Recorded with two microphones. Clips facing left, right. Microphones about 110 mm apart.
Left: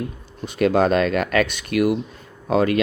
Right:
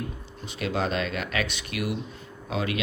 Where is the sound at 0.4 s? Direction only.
50° left (ahead or behind).